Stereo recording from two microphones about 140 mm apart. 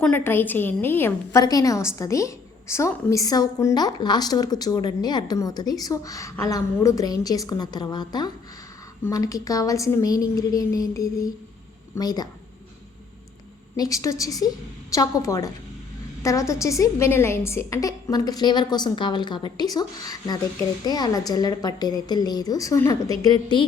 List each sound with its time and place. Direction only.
0.0 s a woman's voice: 15° left (ahead or behind)
13.7 s a woman's voice: 25° left (ahead or behind)